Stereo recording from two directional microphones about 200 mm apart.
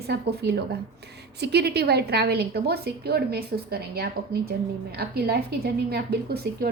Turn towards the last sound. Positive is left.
turn(degrees=-50)  # may be behind; listen again after turning